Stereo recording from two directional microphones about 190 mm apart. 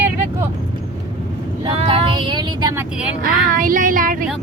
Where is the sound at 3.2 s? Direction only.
45° right (ahead or behind).